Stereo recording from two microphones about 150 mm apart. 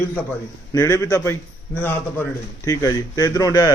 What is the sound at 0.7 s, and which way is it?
A man's voice, 25° left (ahead or behind).